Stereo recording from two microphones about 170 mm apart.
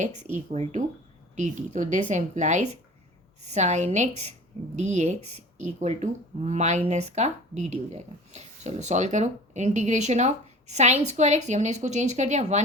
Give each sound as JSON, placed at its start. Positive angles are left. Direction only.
{"t": 0.0, "sound": "speech", "side_deg": -45}